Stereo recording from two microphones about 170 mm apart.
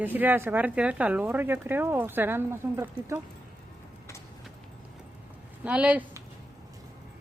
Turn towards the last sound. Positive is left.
turn(degrees=-5)  # may be behind; listen again after turning